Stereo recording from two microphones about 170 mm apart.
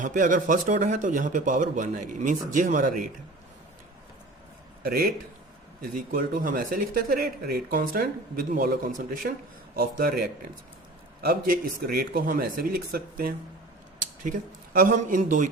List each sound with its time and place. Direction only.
0.0 s a man's voice: 50° right (ahead or behind)
4.8 s a man's voice: 60° right (ahead or behind)